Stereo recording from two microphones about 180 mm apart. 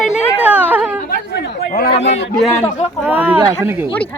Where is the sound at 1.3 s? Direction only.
55° left (ahead or behind).